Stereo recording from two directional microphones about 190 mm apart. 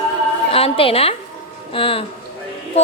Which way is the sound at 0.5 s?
30° left (ahead or behind).